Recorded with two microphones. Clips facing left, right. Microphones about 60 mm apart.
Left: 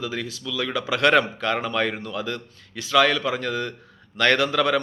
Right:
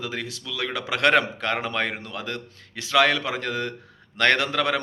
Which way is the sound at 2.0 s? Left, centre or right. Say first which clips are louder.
Left 3 dB; right.